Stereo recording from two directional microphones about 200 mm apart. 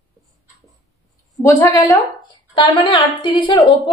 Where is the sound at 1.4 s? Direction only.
15° left (ahead or behind).